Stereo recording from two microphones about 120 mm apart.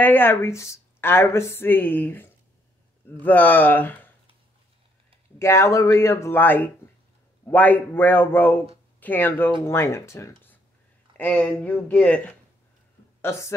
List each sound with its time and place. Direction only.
0.0 s speech: 15° left (ahead or behind)
5.4 s speech: 25° left (ahead or behind)
13.2 s a woman's voice: 20° left (ahead or behind)